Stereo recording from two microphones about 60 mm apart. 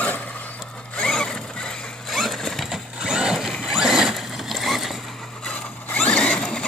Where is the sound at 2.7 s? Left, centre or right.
Centre.